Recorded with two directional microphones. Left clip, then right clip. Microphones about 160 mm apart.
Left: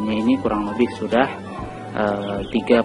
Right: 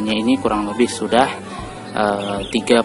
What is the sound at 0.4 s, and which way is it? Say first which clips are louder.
Speech: right 3 dB; 20° right (ahead or behind).